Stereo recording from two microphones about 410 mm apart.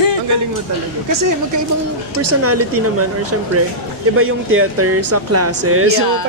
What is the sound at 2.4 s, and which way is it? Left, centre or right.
Speech, right.